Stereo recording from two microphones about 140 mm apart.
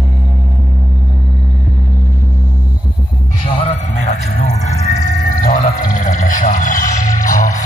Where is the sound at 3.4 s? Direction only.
45° left (ahead or behind).